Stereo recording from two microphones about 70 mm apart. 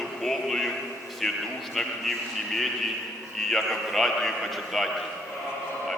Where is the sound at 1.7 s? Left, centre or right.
Centre.